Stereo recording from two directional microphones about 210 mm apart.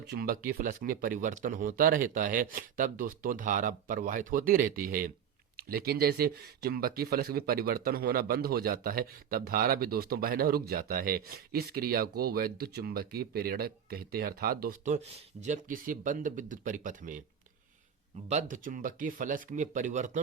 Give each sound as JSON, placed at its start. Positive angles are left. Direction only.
{"t": 0.1, "sound": "speech", "side_deg": -45}
{"t": 18.3, "sound": "speech", "side_deg": -35}